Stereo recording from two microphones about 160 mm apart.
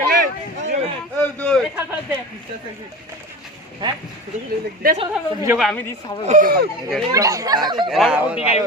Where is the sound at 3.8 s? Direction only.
30° right (ahead or behind).